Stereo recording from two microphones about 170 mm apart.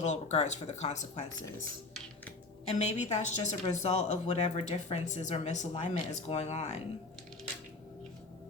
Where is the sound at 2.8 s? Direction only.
40° left (ahead or behind).